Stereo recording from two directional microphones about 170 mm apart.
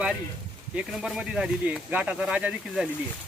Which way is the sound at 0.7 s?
5° right (ahead or behind).